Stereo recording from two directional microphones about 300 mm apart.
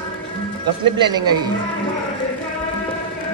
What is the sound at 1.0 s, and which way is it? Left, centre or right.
Speech, centre.